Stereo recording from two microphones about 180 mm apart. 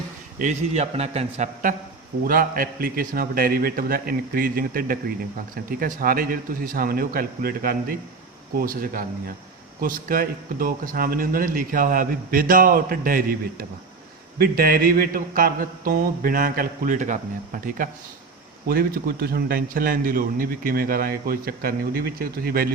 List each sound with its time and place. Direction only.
0.3 s a man's voice: 40° right (ahead or behind)
2.2 s a man's voice: 50° right (ahead or behind)